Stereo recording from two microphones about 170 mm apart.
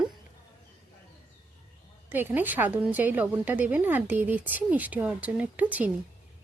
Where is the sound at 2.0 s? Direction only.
10° right (ahead or behind).